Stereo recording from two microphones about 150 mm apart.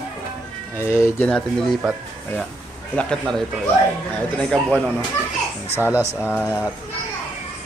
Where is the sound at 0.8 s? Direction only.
15° left (ahead or behind).